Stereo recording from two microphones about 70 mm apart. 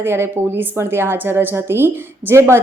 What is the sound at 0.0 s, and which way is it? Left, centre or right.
A woman's voice, right.